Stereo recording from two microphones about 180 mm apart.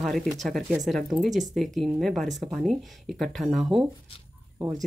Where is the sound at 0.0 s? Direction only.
Centre (ahead or behind).